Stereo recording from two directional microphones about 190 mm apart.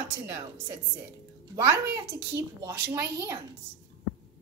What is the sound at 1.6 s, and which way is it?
A woman's voice, 15° right (ahead or behind).